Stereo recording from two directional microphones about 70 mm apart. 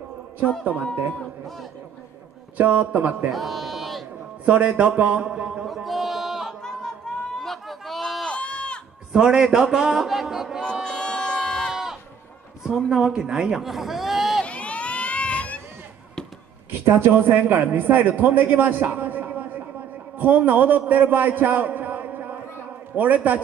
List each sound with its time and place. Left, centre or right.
2.5 s a man's voice: right
3.3 s music: centre
4.5 s a man's voice: centre
5.9 s a sound: centre
6.6 s a sound: centre
8.3 s sheep: centre
9.1 s a man's voice: centre
10.6 s crowd: centre
11.7 s a sound: centre
12.6 s speech: centre
14.4 s baby cry: centre
16.8 s a man's voice: right